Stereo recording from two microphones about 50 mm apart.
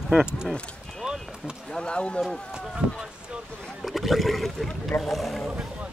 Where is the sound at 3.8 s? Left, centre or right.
Centre.